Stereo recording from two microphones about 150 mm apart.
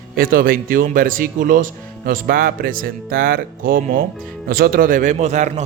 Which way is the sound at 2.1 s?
75° right (ahead or behind).